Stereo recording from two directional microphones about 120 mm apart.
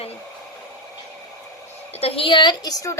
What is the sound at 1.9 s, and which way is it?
Speech, 55° left (ahead or behind).